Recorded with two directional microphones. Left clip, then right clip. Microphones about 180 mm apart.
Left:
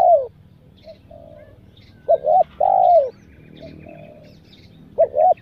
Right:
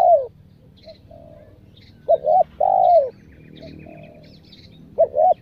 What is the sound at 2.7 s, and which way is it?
Bird, 10° right (ahead or behind).